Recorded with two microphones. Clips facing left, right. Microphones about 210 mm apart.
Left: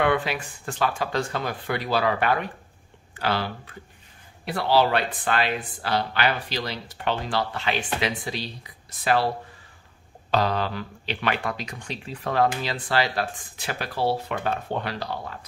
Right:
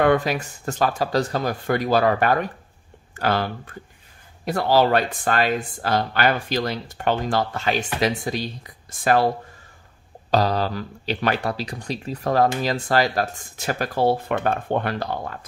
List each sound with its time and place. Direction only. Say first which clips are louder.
0.0 s speech: right 5 dB; 40° right (ahead or behind)
10.3 s speech: right 3 dB; 40° right (ahead or behind)